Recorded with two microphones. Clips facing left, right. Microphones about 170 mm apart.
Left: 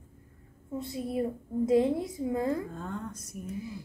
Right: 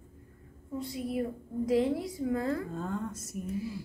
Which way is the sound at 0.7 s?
25° left (ahead or behind).